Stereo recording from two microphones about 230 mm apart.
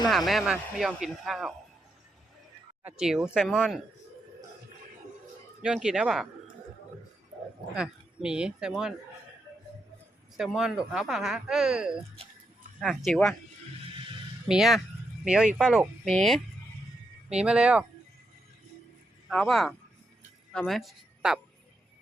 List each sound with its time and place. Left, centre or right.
0.1 s speech: centre
2.8 s speech: centre
5.6 s speech: centre
7.8 s speech: centre
10.3 s speech: centre
13.8 s a sound: right
14.4 s speech: centre
19.3 s speech: centre